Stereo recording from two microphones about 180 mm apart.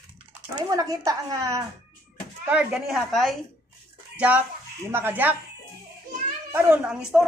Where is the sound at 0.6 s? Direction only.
20° right (ahead or behind).